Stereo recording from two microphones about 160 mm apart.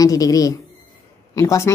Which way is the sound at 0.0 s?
20° left (ahead or behind).